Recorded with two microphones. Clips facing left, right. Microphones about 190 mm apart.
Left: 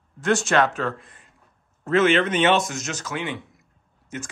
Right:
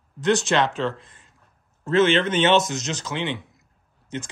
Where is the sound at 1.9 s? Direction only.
30° right (ahead or behind).